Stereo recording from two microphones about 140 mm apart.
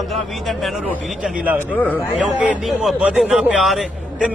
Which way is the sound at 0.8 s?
5° right (ahead or behind).